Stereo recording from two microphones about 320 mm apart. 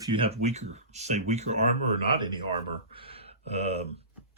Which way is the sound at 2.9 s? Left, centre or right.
Centre.